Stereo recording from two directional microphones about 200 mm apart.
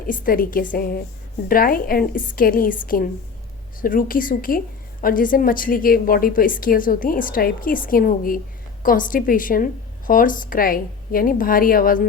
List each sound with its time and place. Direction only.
0.1 s a woman's voice: 45° left (ahead or behind)